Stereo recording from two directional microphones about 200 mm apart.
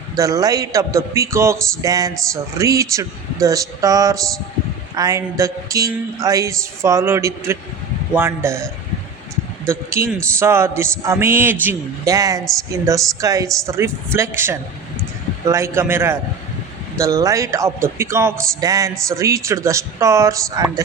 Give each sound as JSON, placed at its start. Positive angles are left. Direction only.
{"t": 0.2, "sound": "a man's voice", "side_deg": -15}
{"t": 9.6, "sound": "a man's voice", "side_deg": -15}